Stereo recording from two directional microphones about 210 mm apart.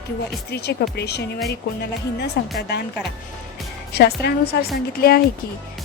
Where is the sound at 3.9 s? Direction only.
50° left (ahead or behind).